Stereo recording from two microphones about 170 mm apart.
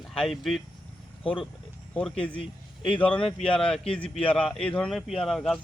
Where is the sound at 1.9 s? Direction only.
5° left (ahead or behind).